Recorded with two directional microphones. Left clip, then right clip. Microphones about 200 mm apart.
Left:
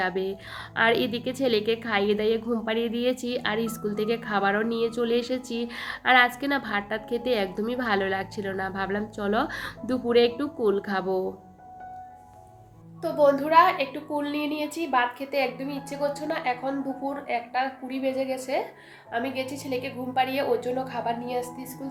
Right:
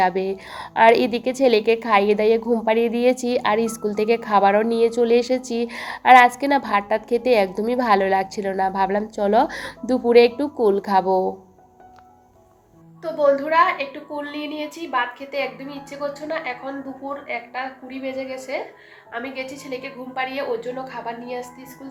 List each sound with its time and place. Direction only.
0.0 s a woman's voice: 15° right (ahead or behind)
13.0 s a woman's voice: 15° left (ahead or behind)